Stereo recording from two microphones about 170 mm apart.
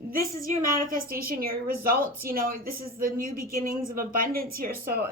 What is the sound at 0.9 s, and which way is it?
A woman's voice, 60° right (ahead or behind).